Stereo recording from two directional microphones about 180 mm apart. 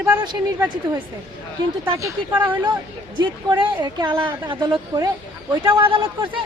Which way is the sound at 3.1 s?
25° right (ahead or behind).